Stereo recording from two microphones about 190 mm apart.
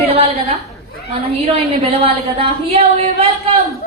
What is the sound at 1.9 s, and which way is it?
Speech, 30° right (ahead or behind).